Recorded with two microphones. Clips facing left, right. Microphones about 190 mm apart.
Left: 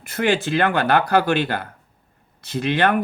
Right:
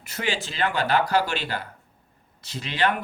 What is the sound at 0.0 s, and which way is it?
Speech, 55° left (ahead or behind).